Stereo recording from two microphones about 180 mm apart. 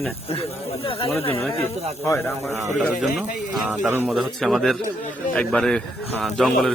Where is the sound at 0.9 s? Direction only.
30° left (ahead or behind).